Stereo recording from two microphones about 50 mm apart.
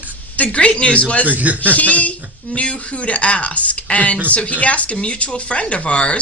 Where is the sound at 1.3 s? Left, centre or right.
Right.